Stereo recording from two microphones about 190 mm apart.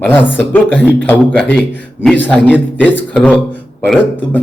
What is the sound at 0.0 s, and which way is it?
A man's voice, 10° left (ahead or behind).